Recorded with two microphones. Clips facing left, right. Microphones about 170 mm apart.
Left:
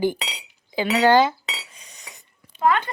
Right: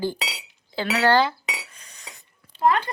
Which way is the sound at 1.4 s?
15° right (ahead or behind).